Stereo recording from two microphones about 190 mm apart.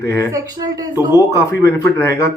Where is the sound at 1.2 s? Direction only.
15° left (ahead or behind).